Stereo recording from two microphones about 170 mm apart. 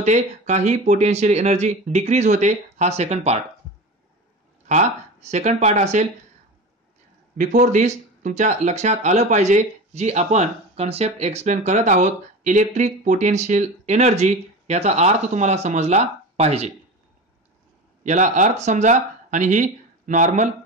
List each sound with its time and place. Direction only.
0.0 s speech: 45° right (ahead or behind)
4.6 s speech: 40° right (ahead or behind)
7.3 s speech: 45° right (ahead or behind)
18.0 s speech: 45° right (ahead or behind)